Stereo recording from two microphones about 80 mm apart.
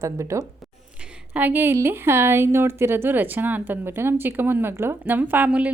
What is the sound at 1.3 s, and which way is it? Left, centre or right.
Speech, right.